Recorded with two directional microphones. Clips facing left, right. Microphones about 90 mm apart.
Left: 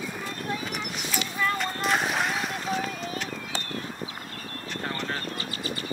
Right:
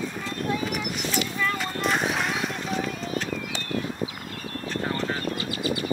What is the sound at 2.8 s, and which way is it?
Run, 35° right (ahead or behind).